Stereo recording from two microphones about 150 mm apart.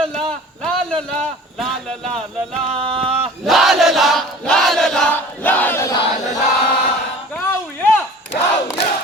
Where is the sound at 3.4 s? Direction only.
Centre (ahead or behind); by 5.9 s 15° left (ahead or behind).